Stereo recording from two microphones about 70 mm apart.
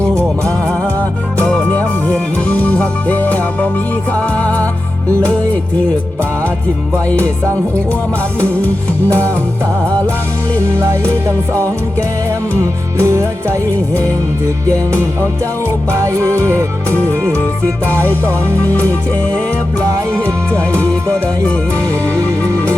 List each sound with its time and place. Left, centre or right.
0.0 s music: right
2.1 s music: centre
8.4 s music: left
9.1 s music: right
13.0 s music: right
15.9 s music: right
16.9 s music: left
17.9 s music: right
18.7 s music: left